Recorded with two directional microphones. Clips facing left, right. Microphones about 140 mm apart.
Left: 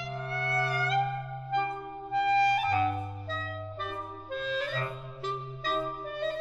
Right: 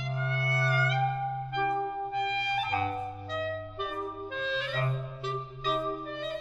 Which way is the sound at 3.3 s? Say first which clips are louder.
Right 4 dB; 15° right (ahead or behind).